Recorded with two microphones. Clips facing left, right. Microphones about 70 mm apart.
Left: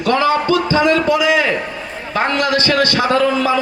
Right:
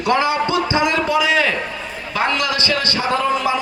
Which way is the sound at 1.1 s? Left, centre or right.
Centre.